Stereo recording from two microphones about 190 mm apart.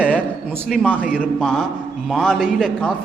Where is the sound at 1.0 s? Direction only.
5° right (ahead or behind).